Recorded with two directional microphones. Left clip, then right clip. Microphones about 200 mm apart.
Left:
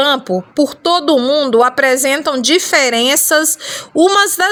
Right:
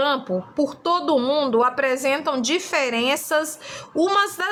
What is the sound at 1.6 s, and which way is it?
A woman's voice, 40° left (ahead or behind).